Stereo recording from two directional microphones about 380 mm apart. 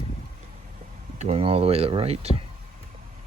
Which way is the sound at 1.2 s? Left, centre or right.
Centre.